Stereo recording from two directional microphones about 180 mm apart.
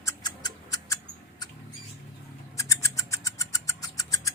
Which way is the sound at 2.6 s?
15° left (ahead or behind).